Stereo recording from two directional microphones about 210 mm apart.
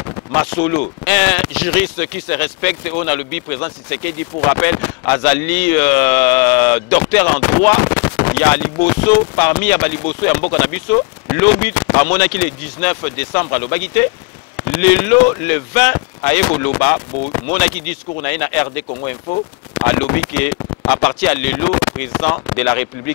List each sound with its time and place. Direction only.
0.0 s speech: 15° left (ahead or behind)